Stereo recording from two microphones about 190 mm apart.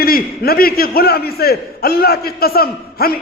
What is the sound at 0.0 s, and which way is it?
A man's voice, 50° left (ahead or behind).